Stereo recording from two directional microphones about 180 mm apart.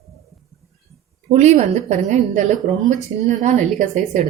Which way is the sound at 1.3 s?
40° right (ahead or behind).